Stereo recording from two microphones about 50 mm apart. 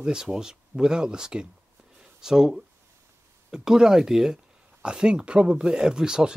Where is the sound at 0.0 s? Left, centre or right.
Centre.